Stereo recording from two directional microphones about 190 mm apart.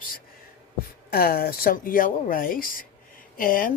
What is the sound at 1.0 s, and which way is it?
Speech, 50° left (ahead or behind).